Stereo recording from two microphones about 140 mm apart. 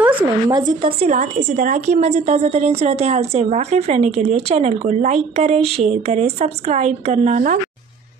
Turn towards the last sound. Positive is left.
turn(degrees=-60)  # may be behind; listen again after turning